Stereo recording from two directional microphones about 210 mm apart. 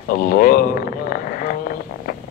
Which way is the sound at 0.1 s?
45° left (ahead or behind).